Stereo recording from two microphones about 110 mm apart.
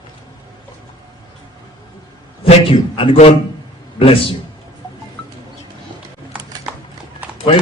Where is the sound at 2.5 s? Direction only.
55° left (ahead or behind).